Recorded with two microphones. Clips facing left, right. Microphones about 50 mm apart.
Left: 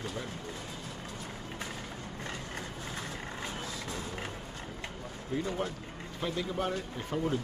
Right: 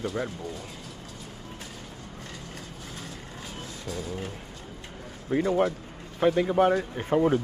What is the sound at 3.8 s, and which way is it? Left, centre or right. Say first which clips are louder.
Music: right 4 dB; left.